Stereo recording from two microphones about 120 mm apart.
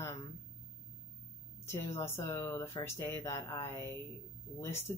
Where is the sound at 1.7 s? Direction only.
20° left (ahead or behind).